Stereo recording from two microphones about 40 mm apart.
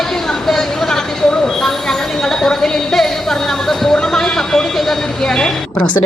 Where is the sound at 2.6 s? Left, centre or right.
Centre.